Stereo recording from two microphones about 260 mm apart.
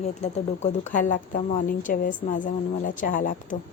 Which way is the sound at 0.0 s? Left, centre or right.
Left.